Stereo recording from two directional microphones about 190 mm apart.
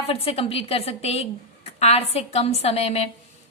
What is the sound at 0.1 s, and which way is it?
A woman's voice, 30° left (ahead or behind).